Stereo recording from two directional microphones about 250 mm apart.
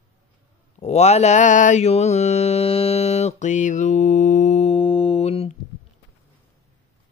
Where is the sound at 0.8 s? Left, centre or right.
Left.